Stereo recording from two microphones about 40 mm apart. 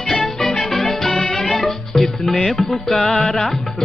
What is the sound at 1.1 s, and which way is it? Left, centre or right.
Music, left.